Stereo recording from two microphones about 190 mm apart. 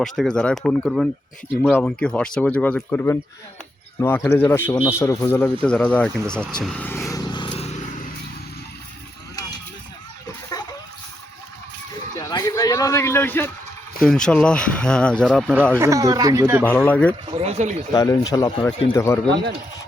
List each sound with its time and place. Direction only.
0.0 s speech: centre (ahead or behind); by 7.9 s 35° left (ahead or behind)
10.2 s a sound: 20° left (ahead or behind)
12.1 s a sound: 15° left (ahead or behind)
14.0 s speech: 5° left (ahead or behind)
15.8 s speech: 15° right (ahead or behind)
16.6 s speech: 10° left (ahead or behind)
17.3 s speech: 35° right (ahead or behind)
17.9 s speech: 20° left (ahead or behind)